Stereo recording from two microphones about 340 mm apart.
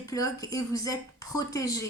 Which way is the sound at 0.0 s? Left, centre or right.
Centre.